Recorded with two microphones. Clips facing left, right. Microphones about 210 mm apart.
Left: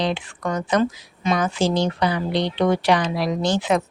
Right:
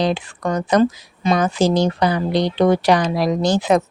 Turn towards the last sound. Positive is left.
turn(degrees=-40)  # may be behind; listen again after turning